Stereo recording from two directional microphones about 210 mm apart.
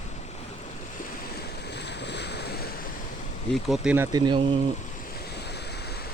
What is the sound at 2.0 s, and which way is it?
Waves, 55° left (ahead or behind).